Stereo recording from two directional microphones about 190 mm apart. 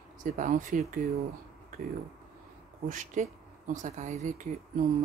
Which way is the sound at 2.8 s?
40° right (ahead or behind).